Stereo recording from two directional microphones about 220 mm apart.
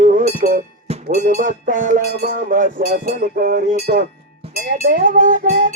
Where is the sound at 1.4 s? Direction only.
35° right (ahead or behind).